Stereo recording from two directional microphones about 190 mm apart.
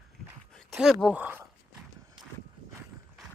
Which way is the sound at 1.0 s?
5° right (ahead or behind).